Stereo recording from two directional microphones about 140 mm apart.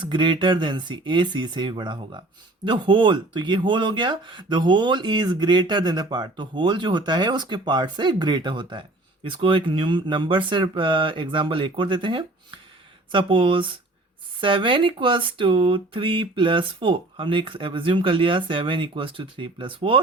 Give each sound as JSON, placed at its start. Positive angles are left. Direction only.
{"t": 0.0, "sound": "speech", "side_deg": -35}